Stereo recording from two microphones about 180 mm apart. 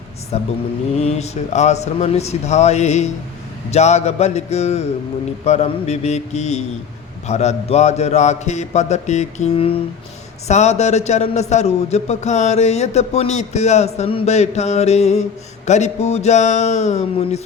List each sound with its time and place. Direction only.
0.3 s a man's voice: 35° left (ahead or behind)